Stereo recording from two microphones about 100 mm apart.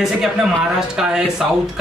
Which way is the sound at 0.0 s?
5° right (ahead or behind).